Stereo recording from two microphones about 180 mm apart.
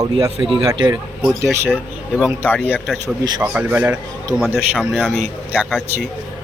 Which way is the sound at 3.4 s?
10° right (ahead or behind).